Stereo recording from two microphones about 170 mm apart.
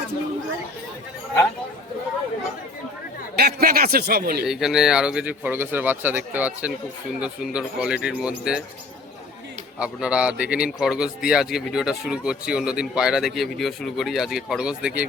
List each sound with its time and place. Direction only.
3.3 s a man's voice: 65° right (ahead or behind)
4.4 s speech: 5° right (ahead or behind)
9.7 s speech: 5° right (ahead or behind)